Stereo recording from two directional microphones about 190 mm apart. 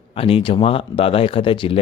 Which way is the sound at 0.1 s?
30° left (ahead or behind).